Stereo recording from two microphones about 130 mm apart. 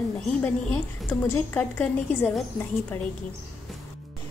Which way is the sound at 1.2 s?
15° left (ahead or behind).